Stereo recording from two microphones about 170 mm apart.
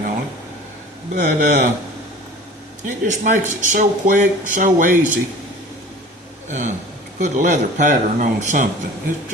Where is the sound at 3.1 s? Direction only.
50° right (ahead or behind).